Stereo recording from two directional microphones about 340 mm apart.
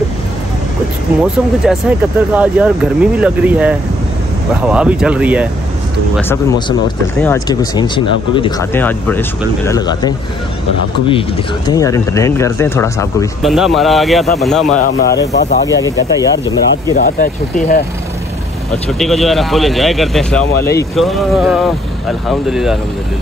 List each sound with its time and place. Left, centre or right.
1.2 s speech: centre
6.1 s speech: centre
14.8 s speech: left
15.8 s speech: centre
16.9 s speech: left
18.9 s speech: centre